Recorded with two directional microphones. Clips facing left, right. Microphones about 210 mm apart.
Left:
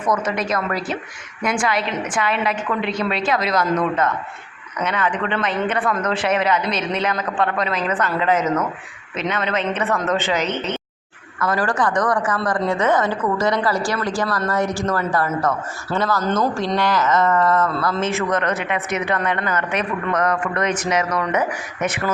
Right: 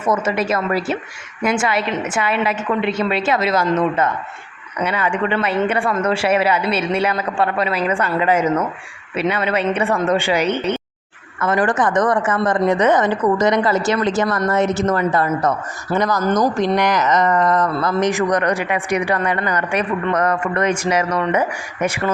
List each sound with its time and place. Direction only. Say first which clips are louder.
0.0 s a woman's voice: right 3 dB; 5° right (ahead or behind)
11.3 s a woman's voice: right 3 dB; 20° right (ahead or behind)